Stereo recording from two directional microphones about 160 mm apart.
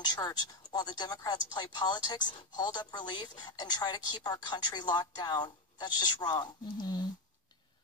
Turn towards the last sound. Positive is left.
turn(degrees=25)  # may be behind; listen again after turning